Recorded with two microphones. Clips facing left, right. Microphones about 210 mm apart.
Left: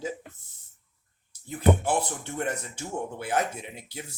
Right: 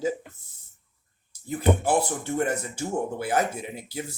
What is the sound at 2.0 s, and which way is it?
Speech, 5° right (ahead or behind).